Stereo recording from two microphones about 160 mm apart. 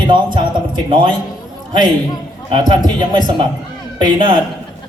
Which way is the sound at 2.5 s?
30° right (ahead or behind).